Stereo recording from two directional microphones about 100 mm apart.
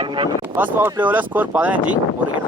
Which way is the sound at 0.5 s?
20° right (ahead or behind).